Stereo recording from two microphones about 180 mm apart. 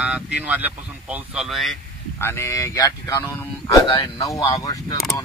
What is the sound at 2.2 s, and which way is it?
Speech, 15° left (ahead or behind).